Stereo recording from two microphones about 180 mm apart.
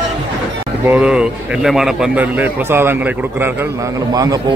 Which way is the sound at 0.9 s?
5° right (ahead or behind).